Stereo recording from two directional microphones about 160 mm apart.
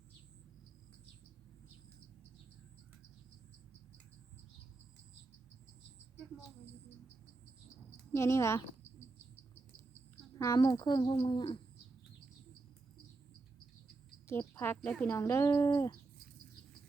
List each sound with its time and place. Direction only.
7.9 s a sound: 15° left (ahead or behind)
10.3 s speech: 20° left (ahead or behind)
14.3 s a woman's voice: 15° left (ahead or behind)
14.8 s speech: 5° left (ahead or behind); by 16.0 s 20° left (ahead or behind)